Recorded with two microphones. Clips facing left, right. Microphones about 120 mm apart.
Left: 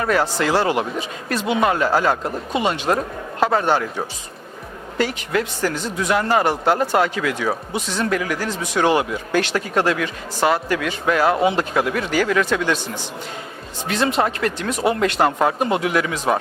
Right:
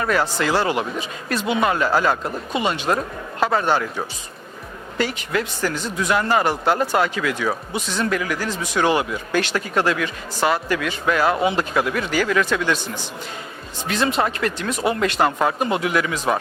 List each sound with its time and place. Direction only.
0.0 s speech: 40° left (ahead or behind)
2.5 s speech: 50° left (ahead or behind)
3.4 s speech: 35° left (ahead or behind)
4.9 s speech: 45° left (ahead or behind)
13.8 s speech: 45° left (ahead or behind)